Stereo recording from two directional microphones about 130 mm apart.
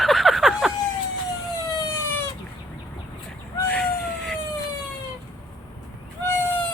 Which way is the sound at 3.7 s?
5° left (ahead or behind).